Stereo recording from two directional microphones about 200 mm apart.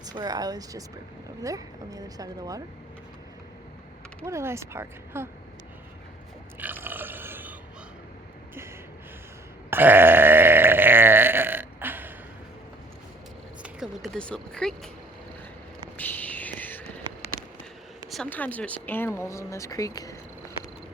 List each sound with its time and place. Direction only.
0.0 s speech: 20° right (ahead or behind)
4.3 s speech: 15° right (ahead or behind)
6.6 s burping: 10° right (ahead or behind)
9.6 s burping: 10° right (ahead or behind)
13.6 s a sound: 5° right (ahead or behind)
16.0 s a sound: 10° left (ahead or behind)
18.1 s speech: 5° left (ahead or behind)